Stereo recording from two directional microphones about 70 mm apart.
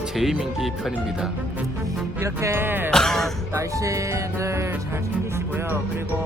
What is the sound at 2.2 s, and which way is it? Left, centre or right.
Music, right.